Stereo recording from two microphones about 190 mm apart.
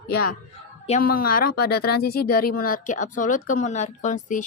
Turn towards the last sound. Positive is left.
turn(degrees=40)  # may be behind; listen again after turning